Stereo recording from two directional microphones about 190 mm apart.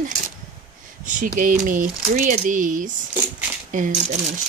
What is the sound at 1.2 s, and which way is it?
Speech, 45° right (ahead or behind).